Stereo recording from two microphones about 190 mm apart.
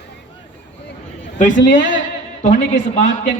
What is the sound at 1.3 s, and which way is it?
A man's voice, 40° left (ahead or behind).